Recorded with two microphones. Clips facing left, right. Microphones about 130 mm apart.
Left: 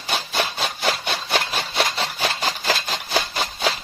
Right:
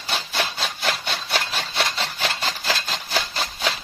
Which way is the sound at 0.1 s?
10° left (ahead or behind).